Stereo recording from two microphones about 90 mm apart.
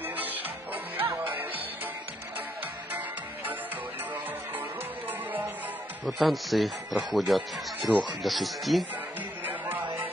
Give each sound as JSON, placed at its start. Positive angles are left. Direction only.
{"t": 0.1, "sound": "music", "side_deg": -20}
{"t": 6.0, "sound": "speech", "side_deg": 0}
{"t": 9.5, "sound": "music", "side_deg": -20}